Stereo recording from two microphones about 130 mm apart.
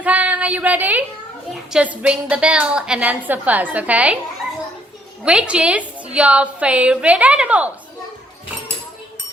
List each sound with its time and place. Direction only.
0.0 s a sound: 10° right (ahead or behind)
1.7 s a woman's voice: 10° right (ahead or behind)
5.2 s a woman's voice: 5° right (ahead or behind)